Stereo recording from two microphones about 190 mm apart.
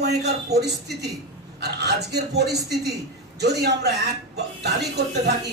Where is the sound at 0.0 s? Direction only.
60° right (ahead or behind).